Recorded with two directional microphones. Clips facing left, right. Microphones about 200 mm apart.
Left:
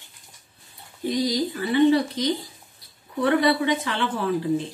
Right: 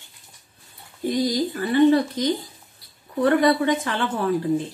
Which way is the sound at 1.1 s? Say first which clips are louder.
Right 1 dB; 50° right (ahead or behind).